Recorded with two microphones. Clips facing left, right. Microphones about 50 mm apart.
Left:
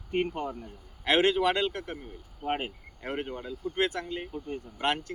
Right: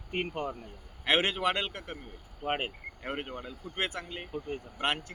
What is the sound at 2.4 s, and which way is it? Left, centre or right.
Speech, right.